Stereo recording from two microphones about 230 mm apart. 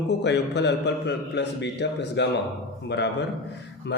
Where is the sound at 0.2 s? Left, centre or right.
Left.